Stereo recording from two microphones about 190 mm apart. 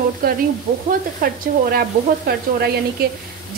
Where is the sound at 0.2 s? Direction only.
50° right (ahead or behind).